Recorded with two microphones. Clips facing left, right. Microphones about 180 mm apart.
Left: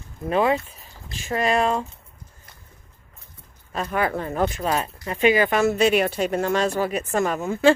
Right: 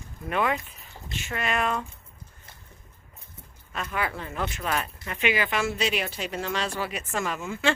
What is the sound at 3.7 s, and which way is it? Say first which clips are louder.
A woman's voice: left 7 dB; 40° left (ahead or behind).